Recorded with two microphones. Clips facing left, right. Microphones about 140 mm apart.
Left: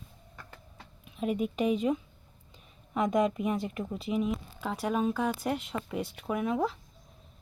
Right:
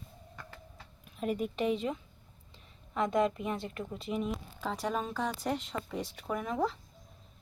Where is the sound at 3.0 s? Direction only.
15° left (ahead or behind).